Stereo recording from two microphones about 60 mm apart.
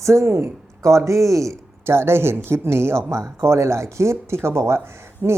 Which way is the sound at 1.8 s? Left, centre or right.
Right.